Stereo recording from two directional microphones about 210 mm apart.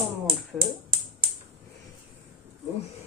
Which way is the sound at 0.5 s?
Centre (ahead or behind).